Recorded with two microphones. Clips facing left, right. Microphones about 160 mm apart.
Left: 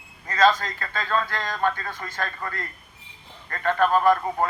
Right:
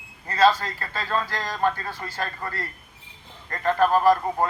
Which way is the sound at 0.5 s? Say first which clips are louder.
Even; 35° right (ahead or behind).